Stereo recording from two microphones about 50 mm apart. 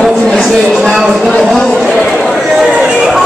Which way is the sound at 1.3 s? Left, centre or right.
Centre.